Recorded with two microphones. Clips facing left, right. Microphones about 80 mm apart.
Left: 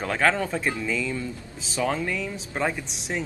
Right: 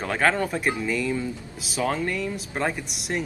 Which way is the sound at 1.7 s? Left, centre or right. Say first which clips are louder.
Right 1 dB; centre.